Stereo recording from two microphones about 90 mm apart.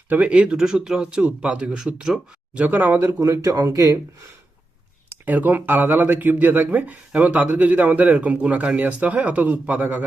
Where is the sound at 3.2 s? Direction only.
40° right (ahead or behind).